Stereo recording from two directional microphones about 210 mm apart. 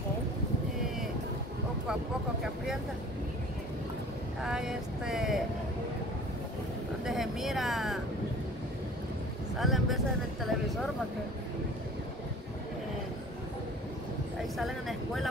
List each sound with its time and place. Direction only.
2.4 s speech: centre (ahead or behind)
4.4 s speech: 5° right (ahead or behind)
7.1 s speech: centre (ahead or behind)
9.6 s speech: centre (ahead or behind)
14.6 s speech: centre (ahead or behind)